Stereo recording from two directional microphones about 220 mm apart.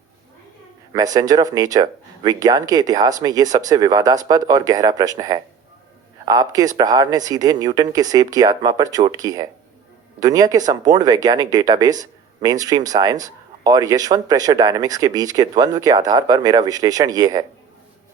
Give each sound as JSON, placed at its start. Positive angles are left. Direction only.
{"t": 1.1, "sound": "speech", "side_deg": -15}